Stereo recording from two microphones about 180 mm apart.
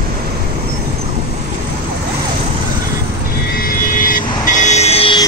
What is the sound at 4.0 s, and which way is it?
Vehicle, 45° left (ahead or behind).